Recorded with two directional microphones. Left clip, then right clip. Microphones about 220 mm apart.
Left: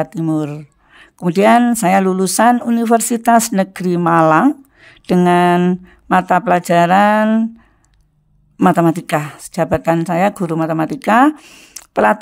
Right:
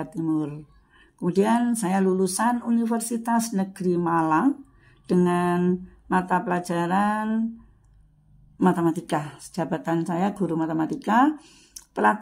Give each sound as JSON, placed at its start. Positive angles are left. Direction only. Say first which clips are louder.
{"t": 0.0, "sound": "speech", "louder": "left 8 dB", "side_deg": 45}
{"t": 8.5, "sound": "speech", "louder": "left 10 dB", "side_deg": 45}